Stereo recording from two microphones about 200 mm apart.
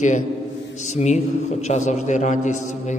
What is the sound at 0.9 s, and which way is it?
A man's voice, 35° left (ahead or behind).